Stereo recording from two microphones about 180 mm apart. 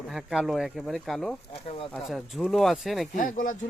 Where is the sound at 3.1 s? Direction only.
50° left (ahead or behind).